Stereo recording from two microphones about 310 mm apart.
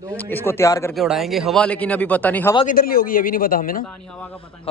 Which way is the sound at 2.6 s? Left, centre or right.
Left.